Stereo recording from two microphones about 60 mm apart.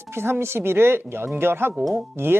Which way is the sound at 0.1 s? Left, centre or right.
Right.